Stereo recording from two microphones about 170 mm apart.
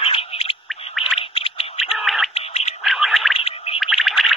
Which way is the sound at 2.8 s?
Centre (ahead or behind).